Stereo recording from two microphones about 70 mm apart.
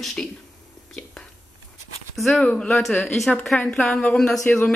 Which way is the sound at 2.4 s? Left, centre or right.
Centre.